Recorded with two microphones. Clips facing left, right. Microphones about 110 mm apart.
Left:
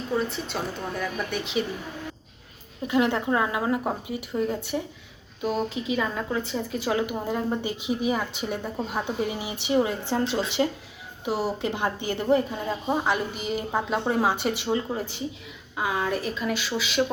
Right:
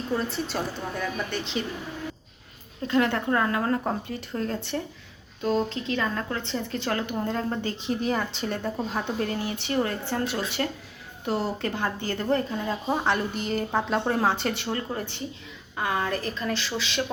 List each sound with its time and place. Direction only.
0.2 s speech: centre (ahead or behind)
2.8 s speech: 15° left (ahead or behind)